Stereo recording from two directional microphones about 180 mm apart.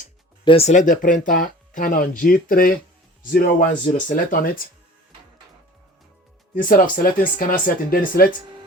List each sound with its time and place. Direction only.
0.4 s speech: 35° left (ahead or behind); by 4.6 s 50° left (ahead or behind)
6.5 s speech: 50° left (ahead or behind)